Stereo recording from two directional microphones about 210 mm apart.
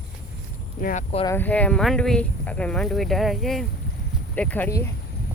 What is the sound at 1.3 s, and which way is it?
Speech, 10° left (ahead or behind).